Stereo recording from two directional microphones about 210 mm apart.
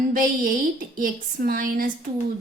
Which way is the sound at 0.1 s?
40° right (ahead or behind).